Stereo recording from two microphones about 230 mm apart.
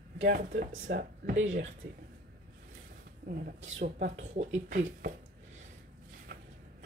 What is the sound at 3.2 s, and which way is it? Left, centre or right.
Speech, right.